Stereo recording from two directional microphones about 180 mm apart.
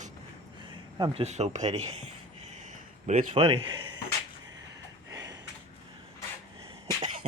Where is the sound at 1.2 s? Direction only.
40° right (ahead or behind).